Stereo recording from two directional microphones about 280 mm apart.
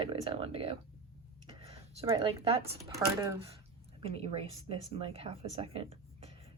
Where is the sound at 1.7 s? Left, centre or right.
Centre.